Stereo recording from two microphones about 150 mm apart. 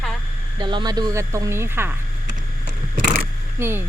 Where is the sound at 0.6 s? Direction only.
30° right (ahead or behind); by 2.0 s 15° right (ahead or behind).